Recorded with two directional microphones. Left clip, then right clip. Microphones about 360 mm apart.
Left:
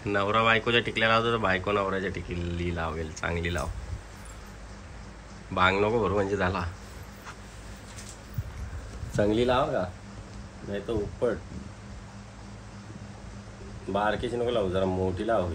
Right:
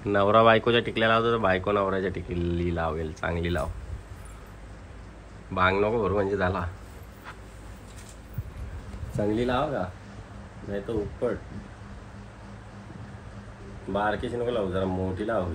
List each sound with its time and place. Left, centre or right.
0.0 s speech: centre
5.5 s speech: centre
9.1 s speech: centre
13.9 s speech: centre